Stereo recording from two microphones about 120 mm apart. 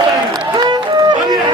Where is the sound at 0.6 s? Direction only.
35° right (ahead or behind).